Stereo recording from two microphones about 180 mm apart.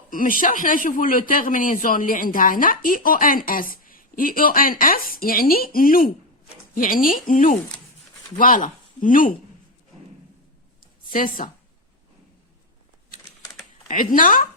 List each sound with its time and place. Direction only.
0.1 s a woman's voice: 50° left (ahead or behind)
11.1 s a woman's voice: 50° left (ahead or behind)
13.8 s a woman's voice: 50° left (ahead or behind)